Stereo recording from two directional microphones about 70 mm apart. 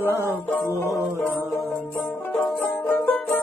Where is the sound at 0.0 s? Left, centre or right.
Right.